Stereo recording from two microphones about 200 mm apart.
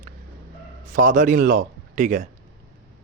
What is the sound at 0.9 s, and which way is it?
Speech, 40° right (ahead or behind).